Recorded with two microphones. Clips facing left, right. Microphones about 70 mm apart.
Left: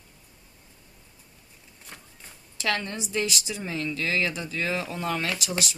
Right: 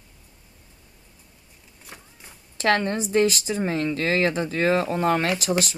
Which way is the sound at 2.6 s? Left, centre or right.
Right.